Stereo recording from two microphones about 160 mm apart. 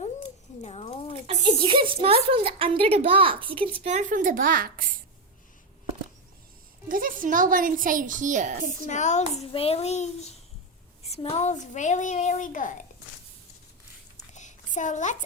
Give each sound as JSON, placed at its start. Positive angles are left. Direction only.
{"t": 0.6, "sound": "a sound", "side_deg": 40}
{"t": 1.5, "sound": "speech", "side_deg": -30}
{"t": 3.8, "sound": "a woman's voice", "side_deg": -50}
{"t": 6.8, "sound": "a woman's voice", "side_deg": -60}
{"t": 8.9, "sound": "a child's voice", "side_deg": 50}
{"t": 14.3, "sound": "a sound", "side_deg": 50}